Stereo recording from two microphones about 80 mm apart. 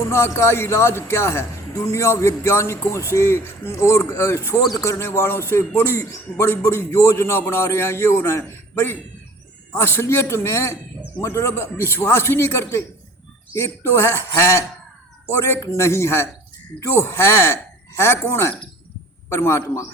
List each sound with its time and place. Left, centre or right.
0.1 s a man's voice: left